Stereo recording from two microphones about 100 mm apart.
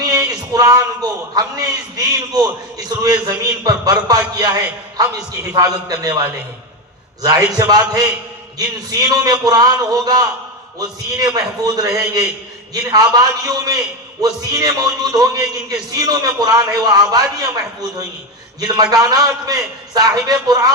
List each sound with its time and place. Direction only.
0.0 s a sound: 35° right (ahead or behind)
1.4 s a man's voice: 35° right (ahead or behind)
18.6 s a man's voice: 40° right (ahead or behind)